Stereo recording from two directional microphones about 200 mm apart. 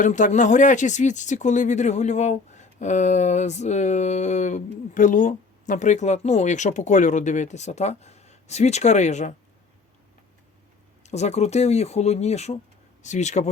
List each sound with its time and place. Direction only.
0.0 s speech: 35° left (ahead or behind)
11.0 s speech: 35° left (ahead or behind)